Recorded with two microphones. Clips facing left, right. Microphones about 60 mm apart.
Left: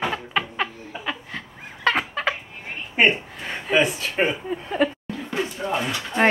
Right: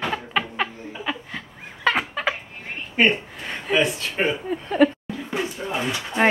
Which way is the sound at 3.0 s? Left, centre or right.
Centre.